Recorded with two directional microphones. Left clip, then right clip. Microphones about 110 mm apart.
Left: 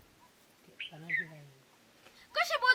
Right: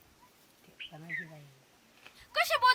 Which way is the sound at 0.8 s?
25° left (ahead or behind).